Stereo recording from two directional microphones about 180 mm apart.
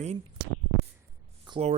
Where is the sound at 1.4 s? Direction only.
25° right (ahead or behind).